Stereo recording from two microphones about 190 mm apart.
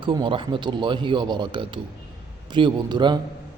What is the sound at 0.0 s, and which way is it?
A man's voice, 25° right (ahead or behind).